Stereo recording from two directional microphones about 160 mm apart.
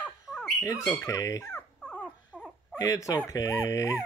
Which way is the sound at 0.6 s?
15° left (ahead or behind).